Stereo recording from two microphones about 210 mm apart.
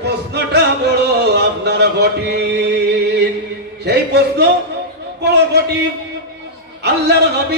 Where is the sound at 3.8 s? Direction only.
50° right (ahead or behind).